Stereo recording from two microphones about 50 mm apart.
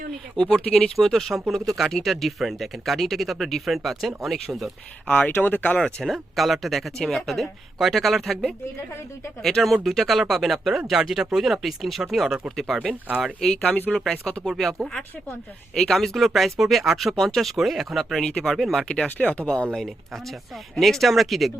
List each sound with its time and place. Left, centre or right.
0.3 s speech: centre
5.0 s speech: left
5.3 s speech: left
6.3 s speech: centre
10.1 s speech: centre
12.9 s speech: right
13.5 s speech: left
14.6 s speech: centre
16.1 s speech: centre
18.2 s speech: centre
18.5 s speech: centre
18.8 s speech: centre
19.7 s speech: centre